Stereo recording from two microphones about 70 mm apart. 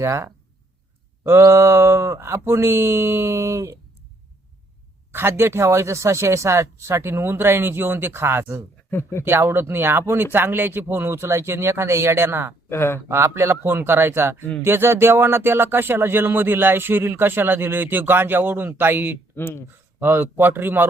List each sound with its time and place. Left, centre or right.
0.0 s speech: right
5.1 s speech: right
8.9 s speech: left
9.2 s speech: right
12.6 s speech: left
13.1 s speech: right
19.4 s speech: left
20.0 s speech: right